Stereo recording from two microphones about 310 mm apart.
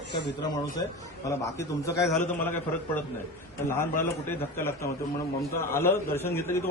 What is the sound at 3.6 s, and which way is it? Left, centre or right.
A man's voice, centre.